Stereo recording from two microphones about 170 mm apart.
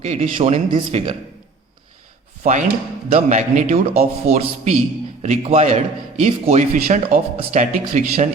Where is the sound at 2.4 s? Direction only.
50° right (ahead or behind).